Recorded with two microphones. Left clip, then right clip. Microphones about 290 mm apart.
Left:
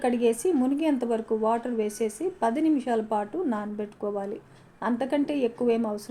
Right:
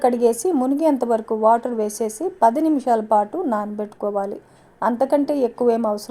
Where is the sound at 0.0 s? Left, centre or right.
Right.